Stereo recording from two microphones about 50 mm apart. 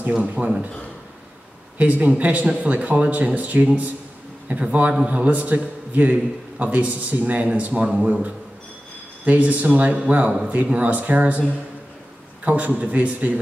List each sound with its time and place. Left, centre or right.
0.3 s a man's voice: right
1.8 s a man's voice: right
12.4 s speech: right